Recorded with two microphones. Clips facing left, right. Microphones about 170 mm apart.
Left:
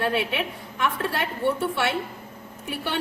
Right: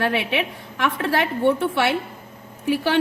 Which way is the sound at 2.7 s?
90° right.